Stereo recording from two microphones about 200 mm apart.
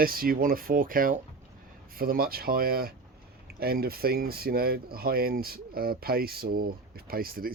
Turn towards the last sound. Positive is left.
turn(degrees=-45)  # may be behind; listen again after turning